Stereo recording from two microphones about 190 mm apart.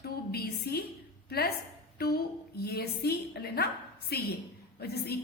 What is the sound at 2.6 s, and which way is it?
A woman's voice, 55° left (ahead or behind).